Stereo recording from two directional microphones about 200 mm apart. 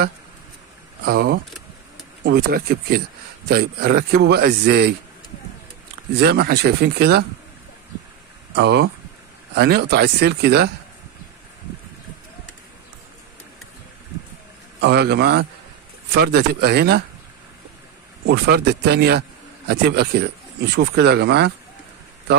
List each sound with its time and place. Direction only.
1.0 s speech: 50° right (ahead or behind)
6.1 s speech: 55° right (ahead or behind)
8.5 s speech: 55° right (ahead or behind)
14.8 s speech: 60° right (ahead or behind)
18.2 s speech: 55° right (ahead or behind)